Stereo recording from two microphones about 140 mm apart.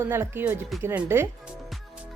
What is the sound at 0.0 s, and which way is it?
Speech, 15° right (ahead or behind).